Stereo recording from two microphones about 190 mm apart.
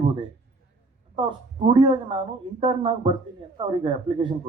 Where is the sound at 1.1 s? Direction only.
25° right (ahead or behind).